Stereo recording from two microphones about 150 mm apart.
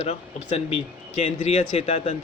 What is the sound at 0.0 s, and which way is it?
A man's voice, 40° left (ahead or behind).